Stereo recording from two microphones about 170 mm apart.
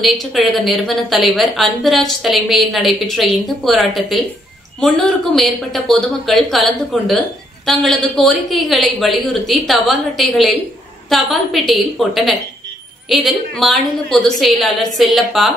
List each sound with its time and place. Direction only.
0.0 s speech: centre (ahead or behind)